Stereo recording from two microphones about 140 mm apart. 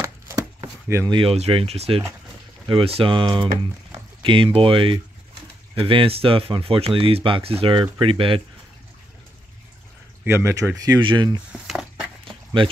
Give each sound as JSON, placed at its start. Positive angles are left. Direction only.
{"t": 0.0, "sound": "chopping", "side_deg": -20}
{"t": 1.1, "sound": "speech", "side_deg": -45}
{"t": 10.2, "sound": "speech", "side_deg": -20}
{"t": 10.9, "sound": "speech", "side_deg": -35}
{"t": 11.5, "sound": "a sound", "side_deg": -5}